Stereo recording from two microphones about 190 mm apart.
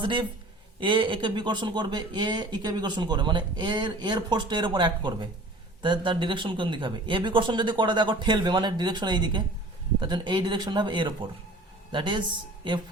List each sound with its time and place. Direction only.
0.0 s speech: 25° right (ahead or behind)